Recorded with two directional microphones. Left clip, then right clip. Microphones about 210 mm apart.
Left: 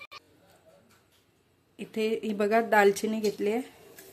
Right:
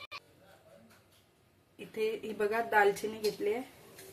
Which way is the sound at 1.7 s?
45° left (ahead or behind).